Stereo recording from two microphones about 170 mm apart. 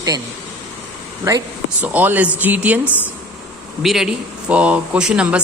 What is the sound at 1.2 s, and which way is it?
Speech, 20° right (ahead or behind).